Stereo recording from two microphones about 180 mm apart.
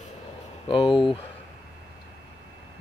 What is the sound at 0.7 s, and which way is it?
Speech, 30° left (ahead or behind).